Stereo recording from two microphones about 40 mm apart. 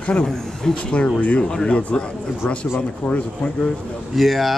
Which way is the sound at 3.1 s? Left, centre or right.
Left.